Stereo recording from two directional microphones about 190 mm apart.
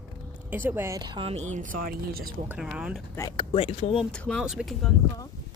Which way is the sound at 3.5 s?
30° left (ahead or behind).